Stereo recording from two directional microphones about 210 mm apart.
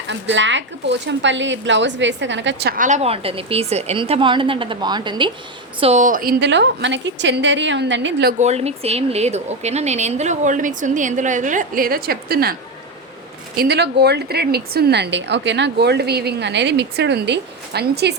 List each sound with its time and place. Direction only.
0.1 s speech: 60° right (ahead or behind)
2.7 s a woman's voice: 35° right (ahead or behind)
5.8 s speech: 35° right (ahead or behind); by 8.4 s 55° right (ahead or behind)
8.4 s speech: 30° right (ahead or behind); by 12.5 s 45° right (ahead or behind)
13.6 s a woman's voice: 50° right (ahead or behind)